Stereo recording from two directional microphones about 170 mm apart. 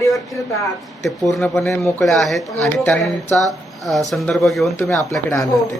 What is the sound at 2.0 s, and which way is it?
Speech, centre (ahead or behind).